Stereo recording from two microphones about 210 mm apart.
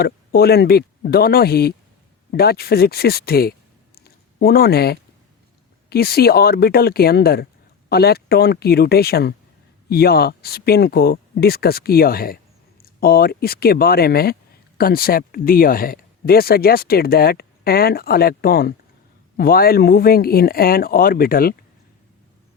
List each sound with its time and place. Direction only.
0.0 s speech: 50° left (ahead or behind)
3.9 s a sound: 45° left (ahead or behind)
5.9 s speech: 45° left (ahead or behind)